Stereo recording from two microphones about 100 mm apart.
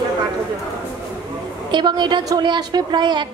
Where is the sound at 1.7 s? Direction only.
50° right (ahead or behind).